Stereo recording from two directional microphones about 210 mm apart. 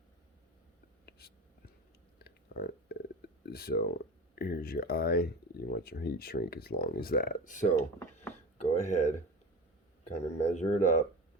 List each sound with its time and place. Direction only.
1.0 s whispering: 50° left (ahead or behind)
2.1 s speech: 50° left (ahead or behind)
7.8 s a sound: 10° left (ahead or behind)
8.6 s speech: 35° left (ahead or behind)
10.2 s speech: 35° left (ahead or behind)